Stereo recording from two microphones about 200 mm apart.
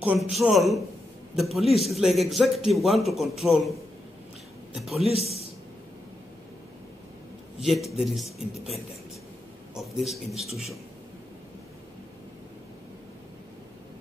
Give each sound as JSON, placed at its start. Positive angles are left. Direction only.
{"t": 0.0, "sound": "a man's voice", "side_deg": -5}
{"t": 5.2, "sound": "a man's voice", "side_deg": 30}
{"t": 7.6, "sound": "a man's voice", "side_deg": 0}
{"t": 10.0, "sound": "a man's voice", "side_deg": 0}